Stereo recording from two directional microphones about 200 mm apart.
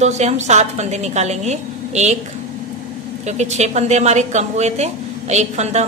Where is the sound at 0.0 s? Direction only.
35° right (ahead or behind).